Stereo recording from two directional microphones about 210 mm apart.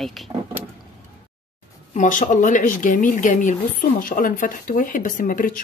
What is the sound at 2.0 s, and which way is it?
Speech, 40° left (ahead or behind).